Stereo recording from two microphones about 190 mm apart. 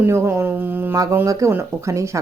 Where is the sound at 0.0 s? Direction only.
15° right (ahead or behind).